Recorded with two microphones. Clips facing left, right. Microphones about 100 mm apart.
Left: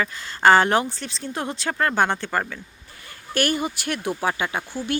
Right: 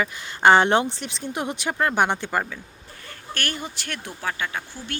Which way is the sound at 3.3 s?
10° left (ahead or behind).